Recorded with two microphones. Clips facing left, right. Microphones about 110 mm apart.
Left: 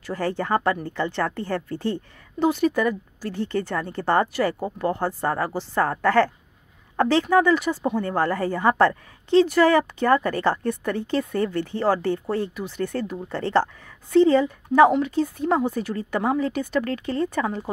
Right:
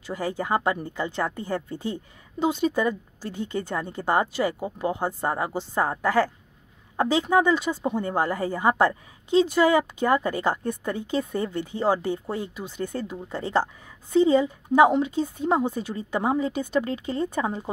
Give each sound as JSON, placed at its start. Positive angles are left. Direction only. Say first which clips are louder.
{"t": 0.0, "sound": "a woman's voice", "louder": "left 3 dB", "side_deg": -15}